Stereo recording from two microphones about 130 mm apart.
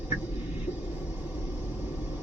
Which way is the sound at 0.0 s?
10° right (ahead or behind).